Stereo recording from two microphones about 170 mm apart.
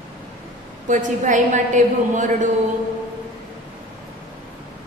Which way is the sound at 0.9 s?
50° right (ahead or behind).